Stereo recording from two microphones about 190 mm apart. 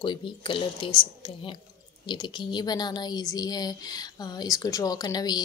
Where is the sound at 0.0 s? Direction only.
25° left (ahead or behind).